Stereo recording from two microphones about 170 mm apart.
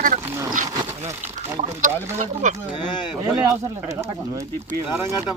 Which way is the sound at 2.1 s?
45° right (ahead or behind).